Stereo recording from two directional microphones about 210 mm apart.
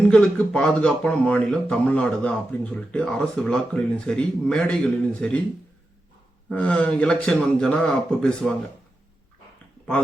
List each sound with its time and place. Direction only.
0.1 s speech: 5° left (ahead or behind)
6.5 s speech: 5° left (ahead or behind)